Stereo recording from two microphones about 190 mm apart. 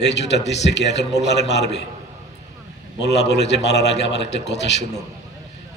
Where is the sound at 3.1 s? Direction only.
65° left (ahead or behind).